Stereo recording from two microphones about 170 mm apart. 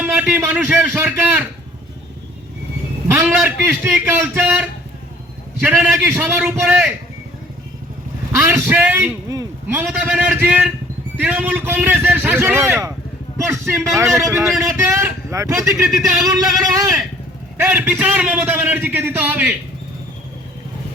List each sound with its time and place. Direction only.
0.0 s a man's voice: 10° right (ahead or behind)
3.1 s a man's voice: 10° right (ahead or behind)
5.6 s a man's voice: 10° right (ahead or behind)
8.4 s a man's voice: 10° right (ahead or behind)
17.6 s a man's voice: 10° right (ahead or behind)